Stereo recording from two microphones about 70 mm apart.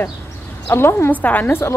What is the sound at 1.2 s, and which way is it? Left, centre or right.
Speech, left.